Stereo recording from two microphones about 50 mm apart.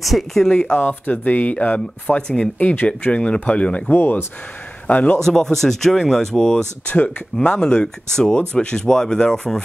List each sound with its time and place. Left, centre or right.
0.0 s speech: centre
0.7 s speech: left
3.9 s speech: left
4.8 s a man's voice: left
5.2 s speech: centre